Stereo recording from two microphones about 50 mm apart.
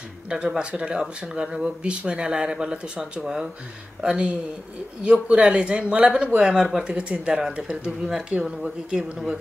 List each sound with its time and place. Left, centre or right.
0.6 s speech: right